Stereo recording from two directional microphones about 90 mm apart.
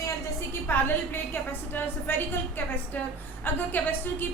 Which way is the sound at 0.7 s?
25° left (ahead or behind).